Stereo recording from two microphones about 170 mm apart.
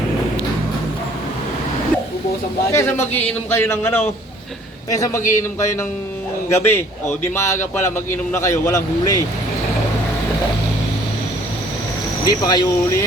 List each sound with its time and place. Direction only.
2.7 s a man's voice: 15° left (ahead or behind)
12.2 s speech: 25° left (ahead or behind)